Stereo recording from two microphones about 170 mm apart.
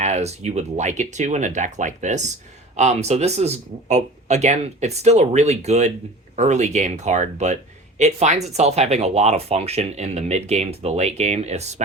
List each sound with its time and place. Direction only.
0.0 s speech: 40° right (ahead or behind)